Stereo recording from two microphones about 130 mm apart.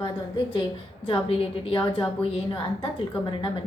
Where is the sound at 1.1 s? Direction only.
45° left (ahead or behind).